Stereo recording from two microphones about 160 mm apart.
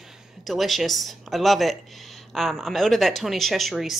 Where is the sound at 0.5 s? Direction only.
Centre (ahead or behind).